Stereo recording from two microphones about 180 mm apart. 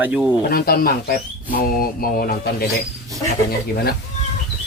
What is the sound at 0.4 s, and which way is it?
Speech, 60° left (ahead or behind).